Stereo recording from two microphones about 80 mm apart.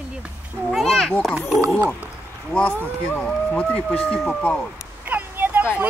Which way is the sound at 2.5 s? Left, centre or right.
Centre.